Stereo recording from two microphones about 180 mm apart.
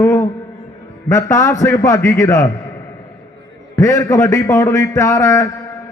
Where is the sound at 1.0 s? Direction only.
15° left (ahead or behind).